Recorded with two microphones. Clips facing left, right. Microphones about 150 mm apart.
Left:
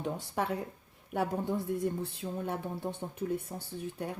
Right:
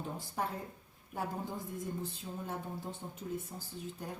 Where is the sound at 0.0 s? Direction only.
75° left (ahead or behind).